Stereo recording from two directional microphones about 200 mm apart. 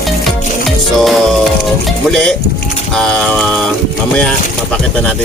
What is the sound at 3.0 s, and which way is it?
Music, 5° left (ahead or behind).